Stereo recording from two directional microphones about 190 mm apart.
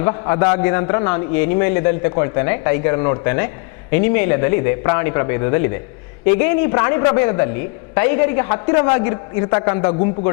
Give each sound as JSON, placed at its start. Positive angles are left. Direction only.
{"t": 0.0, "sound": "a man's voice", "side_deg": 15}